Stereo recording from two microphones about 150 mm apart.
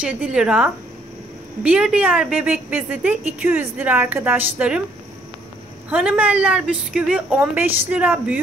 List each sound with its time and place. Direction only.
0.0 s a woman's voice: 5° right (ahead or behind)
5.9 s a woman's voice: 10° right (ahead or behind)